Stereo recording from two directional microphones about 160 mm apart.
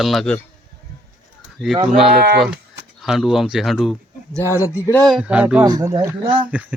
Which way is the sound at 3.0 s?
Centre (ahead or behind).